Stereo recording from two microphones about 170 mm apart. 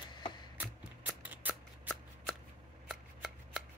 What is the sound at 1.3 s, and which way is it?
Scissors, 10° right (ahead or behind).